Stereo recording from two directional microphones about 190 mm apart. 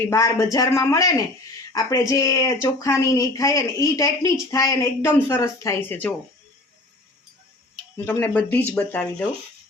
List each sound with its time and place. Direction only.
0.1 s speech: 15° left (ahead or behind)
8.0 s speech: 10° left (ahead or behind)